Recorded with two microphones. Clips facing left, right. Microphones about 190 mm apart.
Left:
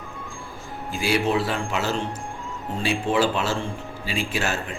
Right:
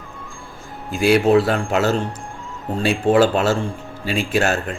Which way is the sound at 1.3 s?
50° right (ahead or behind).